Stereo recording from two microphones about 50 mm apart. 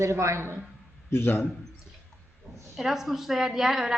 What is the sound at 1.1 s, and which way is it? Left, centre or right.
Speech, left.